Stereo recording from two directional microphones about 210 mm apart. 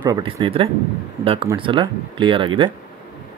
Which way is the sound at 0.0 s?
20° right (ahead or behind).